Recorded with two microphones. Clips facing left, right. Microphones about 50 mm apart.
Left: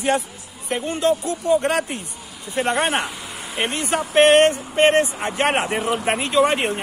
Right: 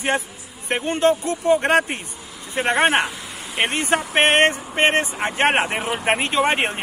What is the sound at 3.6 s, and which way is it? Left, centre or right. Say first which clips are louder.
Speech: right 2 dB; right.